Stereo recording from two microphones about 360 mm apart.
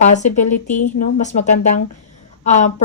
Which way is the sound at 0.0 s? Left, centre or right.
Centre.